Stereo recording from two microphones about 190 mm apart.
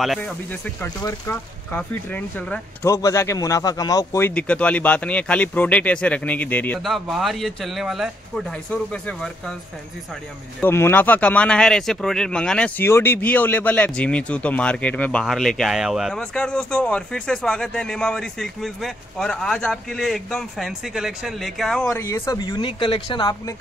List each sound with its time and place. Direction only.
0.0 s speech: 5° left (ahead or behind)
10.6 s speech: 10° left (ahead or behind)
21.8 s speech: 15° left (ahead or behind)